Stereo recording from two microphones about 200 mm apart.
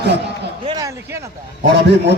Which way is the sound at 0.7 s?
15° right (ahead or behind).